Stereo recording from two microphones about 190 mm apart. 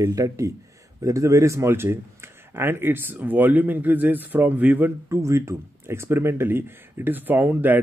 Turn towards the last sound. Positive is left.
turn(degrees=-10)  # may be behind; listen again after turning